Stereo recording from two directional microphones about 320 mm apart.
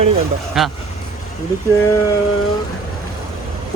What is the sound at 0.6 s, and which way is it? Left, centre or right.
Speech, centre.